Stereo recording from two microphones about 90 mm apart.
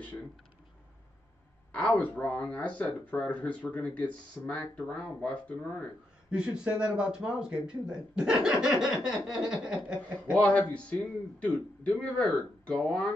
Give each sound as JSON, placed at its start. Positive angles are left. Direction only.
{"t": 1.7, "sound": "speech", "side_deg": 15}
{"t": 6.3, "sound": "speech", "side_deg": -10}
{"t": 10.3, "sound": "speech", "side_deg": 15}